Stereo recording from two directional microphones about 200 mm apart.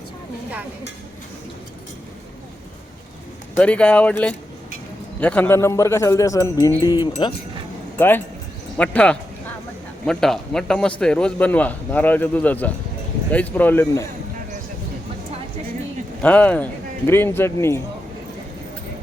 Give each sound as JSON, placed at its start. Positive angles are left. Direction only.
{"t": 3.6, "sound": "a man's voice", "side_deg": 5}
{"t": 7.9, "sound": "a man's voice", "side_deg": 10}
{"t": 16.2, "sound": "a man's voice", "side_deg": 5}